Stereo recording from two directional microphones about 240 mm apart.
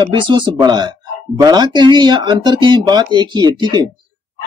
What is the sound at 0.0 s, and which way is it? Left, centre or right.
Speech, centre.